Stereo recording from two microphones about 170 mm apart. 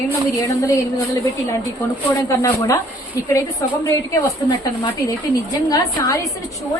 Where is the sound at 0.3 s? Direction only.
20° left (ahead or behind).